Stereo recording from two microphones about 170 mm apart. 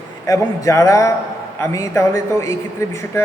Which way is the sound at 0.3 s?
20° left (ahead or behind).